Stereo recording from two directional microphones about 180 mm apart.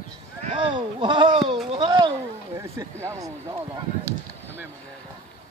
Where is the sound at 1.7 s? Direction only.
25° right (ahead or behind).